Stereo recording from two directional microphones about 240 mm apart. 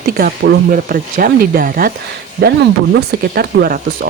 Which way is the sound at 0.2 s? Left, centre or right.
Right.